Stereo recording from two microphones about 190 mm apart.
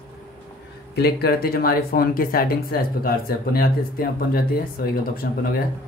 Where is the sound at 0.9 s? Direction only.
55° left (ahead or behind).